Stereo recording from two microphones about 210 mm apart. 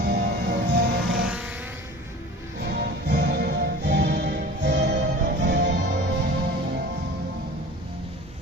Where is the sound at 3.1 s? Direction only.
55° right (ahead or behind).